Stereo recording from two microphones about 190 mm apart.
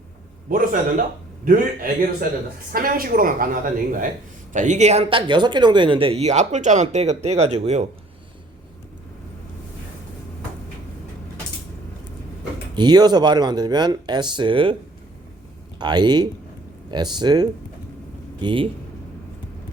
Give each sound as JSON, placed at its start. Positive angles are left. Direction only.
{"t": 0.5, "sound": "a woman's voice", "side_deg": -45}
{"t": 12.7, "sound": "speech", "side_deg": -20}
{"t": 15.8, "sound": "speech", "side_deg": -20}